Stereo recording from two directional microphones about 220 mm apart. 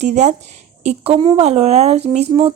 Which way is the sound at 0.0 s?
30° right (ahead or behind).